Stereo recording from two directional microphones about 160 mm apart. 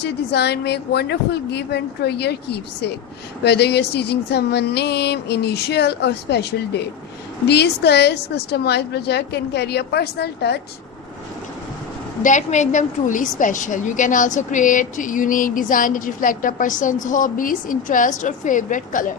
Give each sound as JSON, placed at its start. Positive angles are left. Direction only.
{"t": 0.0, "sound": "speech", "side_deg": 90}
{"t": 12.2, "sound": "a woman's voice", "side_deg": 50}